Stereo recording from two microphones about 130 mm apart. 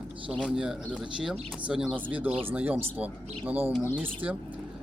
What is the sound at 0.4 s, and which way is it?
Speech, 5° right (ahead or behind).